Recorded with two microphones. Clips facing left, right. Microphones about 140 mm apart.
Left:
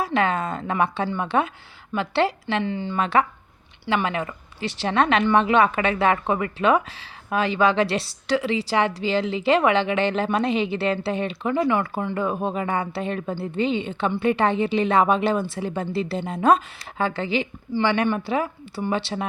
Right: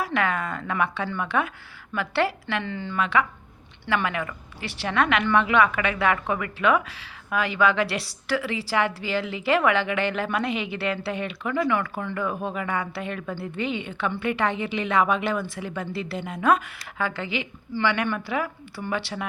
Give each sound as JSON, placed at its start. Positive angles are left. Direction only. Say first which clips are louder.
{"t": 0.0, "sound": "a woman's voice", "louder": "left 3 dB", "side_deg": 25}
{"t": 3.0, "sound": "a woman's voice", "louder": "left 2 dB", "side_deg": 35}